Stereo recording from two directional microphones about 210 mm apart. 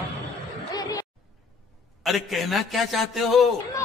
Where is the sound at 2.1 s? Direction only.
Centre (ahead or behind).